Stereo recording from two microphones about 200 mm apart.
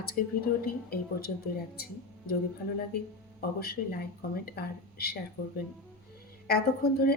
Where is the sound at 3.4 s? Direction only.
50° left (ahead or behind).